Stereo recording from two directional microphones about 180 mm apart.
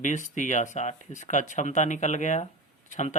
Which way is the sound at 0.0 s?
45° left (ahead or behind).